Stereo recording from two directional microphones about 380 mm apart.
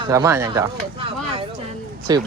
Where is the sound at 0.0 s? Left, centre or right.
Centre.